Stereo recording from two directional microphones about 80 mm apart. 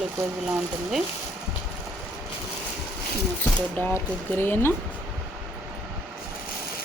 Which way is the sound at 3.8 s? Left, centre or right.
Left.